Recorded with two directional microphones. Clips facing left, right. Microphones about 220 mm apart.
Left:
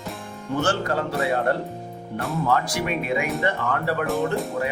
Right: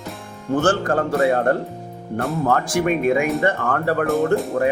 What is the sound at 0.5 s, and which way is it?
Speech, 50° right (ahead or behind).